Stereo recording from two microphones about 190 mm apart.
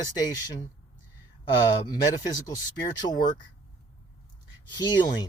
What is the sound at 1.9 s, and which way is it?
Speech, 20° left (ahead or behind).